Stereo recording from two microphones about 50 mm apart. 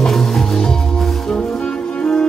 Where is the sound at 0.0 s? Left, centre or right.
Centre.